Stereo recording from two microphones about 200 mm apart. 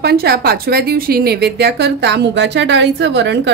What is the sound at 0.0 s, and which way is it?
A woman's voice, 50° right (ahead or behind).